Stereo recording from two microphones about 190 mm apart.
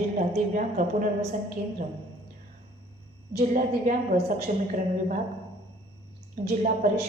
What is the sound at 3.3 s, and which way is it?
A woman's voice, 45° right (ahead or behind).